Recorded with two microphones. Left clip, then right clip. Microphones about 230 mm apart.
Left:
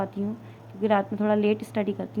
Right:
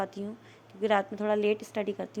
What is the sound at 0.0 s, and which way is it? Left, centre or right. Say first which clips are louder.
A woman's voice: left 4 dB; right.